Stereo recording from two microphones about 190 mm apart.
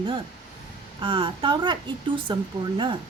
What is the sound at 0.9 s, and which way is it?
Speech, 30° right (ahead or behind).